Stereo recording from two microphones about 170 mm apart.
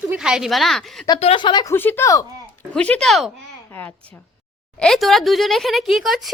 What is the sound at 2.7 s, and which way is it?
Speech, 5° left (ahead or behind).